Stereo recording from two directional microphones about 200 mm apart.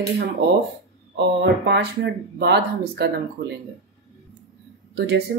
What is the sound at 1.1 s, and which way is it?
Speech, 60° right (ahead or behind).